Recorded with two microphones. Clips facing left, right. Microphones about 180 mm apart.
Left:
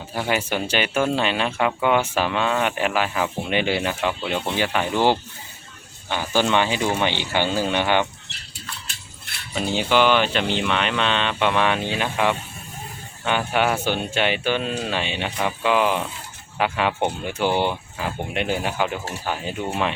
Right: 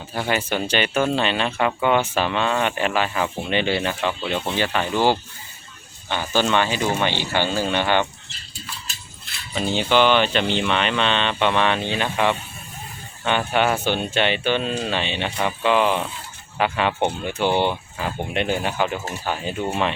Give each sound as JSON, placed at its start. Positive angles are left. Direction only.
{"t": 0.1, "sound": "speech", "side_deg": 10}
{"t": 8.3, "sound": "a sound", "side_deg": 70}
{"t": 9.6, "sound": "speech", "side_deg": 5}